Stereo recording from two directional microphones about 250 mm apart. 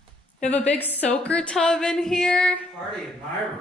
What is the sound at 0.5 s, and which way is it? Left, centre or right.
A woman's voice, centre.